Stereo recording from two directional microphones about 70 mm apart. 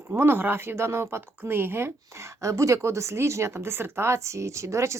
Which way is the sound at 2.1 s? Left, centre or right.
Right.